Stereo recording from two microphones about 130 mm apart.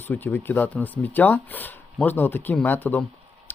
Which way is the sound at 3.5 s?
15° left (ahead or behind).